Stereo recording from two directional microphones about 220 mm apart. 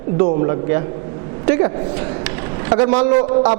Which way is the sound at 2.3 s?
15° right (ahead or behind).